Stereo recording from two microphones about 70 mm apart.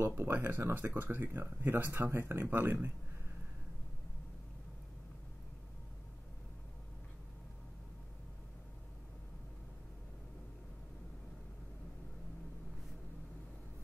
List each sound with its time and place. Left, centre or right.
0.0 s speech: right